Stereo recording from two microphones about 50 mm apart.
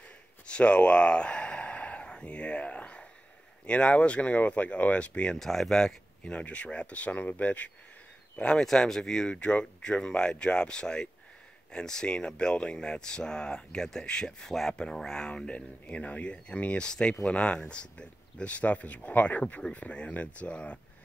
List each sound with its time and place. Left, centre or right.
0.5 s a sound: left
3.6 s speech: left
5.4 s speech: centre
6.3 s speech: left
8.6 s speech: centre